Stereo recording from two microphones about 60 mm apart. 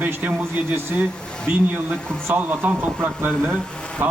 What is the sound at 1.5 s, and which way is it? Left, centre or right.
A man's voice, right.